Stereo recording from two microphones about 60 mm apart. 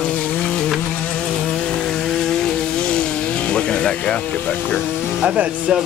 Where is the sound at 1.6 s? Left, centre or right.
Centre; by 5.1 s left.